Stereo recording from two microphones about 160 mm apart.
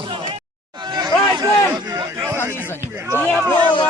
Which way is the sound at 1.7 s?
20° right (ahead or behind).